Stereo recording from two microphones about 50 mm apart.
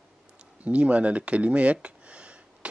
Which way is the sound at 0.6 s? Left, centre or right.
Right.